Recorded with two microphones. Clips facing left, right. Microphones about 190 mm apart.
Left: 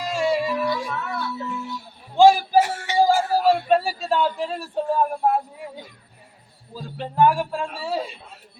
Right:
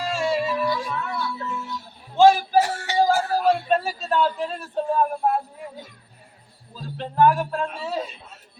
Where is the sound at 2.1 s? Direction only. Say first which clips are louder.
Left 1 dB; 15° left (ahead or behind).